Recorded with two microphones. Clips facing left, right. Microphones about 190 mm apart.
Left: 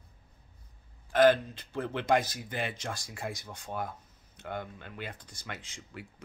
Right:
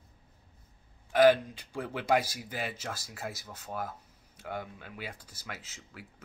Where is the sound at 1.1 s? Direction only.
10° right (ahead or behind).